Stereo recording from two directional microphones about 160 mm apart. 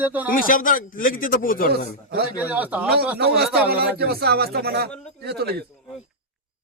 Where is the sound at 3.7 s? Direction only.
75° right (ahead or behind).